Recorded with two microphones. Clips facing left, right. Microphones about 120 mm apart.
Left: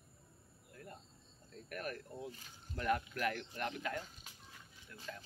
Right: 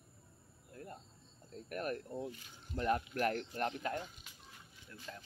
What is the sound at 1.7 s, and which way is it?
Speech, 40° right (ahead or behind).